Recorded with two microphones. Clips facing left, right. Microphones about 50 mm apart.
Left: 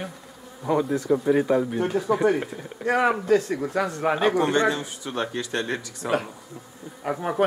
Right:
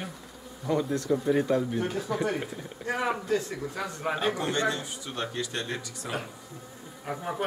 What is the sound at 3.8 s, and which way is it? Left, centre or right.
Speech, left.